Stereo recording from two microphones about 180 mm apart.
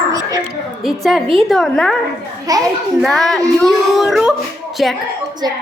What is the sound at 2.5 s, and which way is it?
Speech, 20° right (ahead or behind).